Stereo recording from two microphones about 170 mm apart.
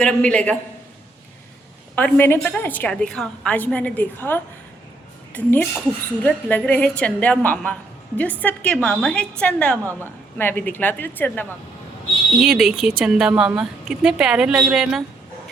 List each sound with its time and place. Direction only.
0.0 s a woman's voice: 5° left (ahead or behind)
2.0 s a woman's voice: 10° left (ahead or behind)
9.8 s a woman's voice: 15° right (ahead or behind)
10.3 s a woman's voice: 10° left (ahead or behind)
12.4 s speech: 5° right (ahead or behind)